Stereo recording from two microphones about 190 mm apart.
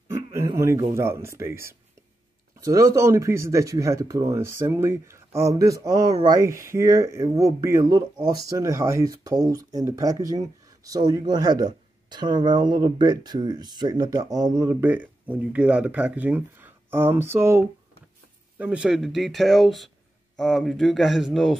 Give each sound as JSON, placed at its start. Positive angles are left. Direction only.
{"t": 0.1, "sound": "speech", "side_deg": -15}